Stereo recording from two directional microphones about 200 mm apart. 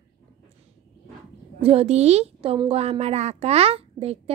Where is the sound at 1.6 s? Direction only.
30° right (ahead or behind).